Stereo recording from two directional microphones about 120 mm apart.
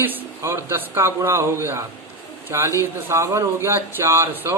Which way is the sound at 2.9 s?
20° right (ahead or behind).